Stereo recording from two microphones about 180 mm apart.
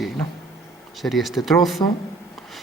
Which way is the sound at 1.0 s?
Centre (ahead or behind).